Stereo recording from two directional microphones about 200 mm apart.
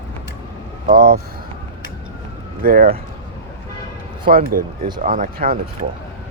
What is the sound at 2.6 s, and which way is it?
Speech, 45° right (ahead or behind).